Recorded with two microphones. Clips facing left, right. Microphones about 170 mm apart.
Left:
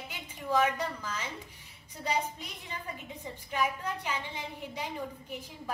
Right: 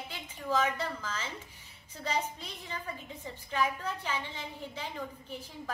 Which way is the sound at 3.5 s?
10° left (ahead or behind).